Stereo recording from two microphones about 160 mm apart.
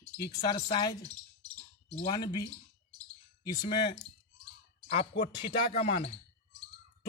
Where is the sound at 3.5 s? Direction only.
25° left (ahead or behind).